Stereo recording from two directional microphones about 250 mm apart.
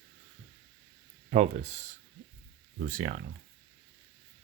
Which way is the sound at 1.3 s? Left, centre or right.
Right.